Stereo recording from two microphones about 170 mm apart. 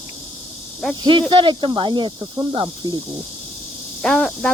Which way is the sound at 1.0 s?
30° right (ahead or behind).